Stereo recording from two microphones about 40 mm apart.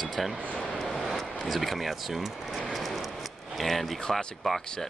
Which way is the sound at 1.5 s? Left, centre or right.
Centre.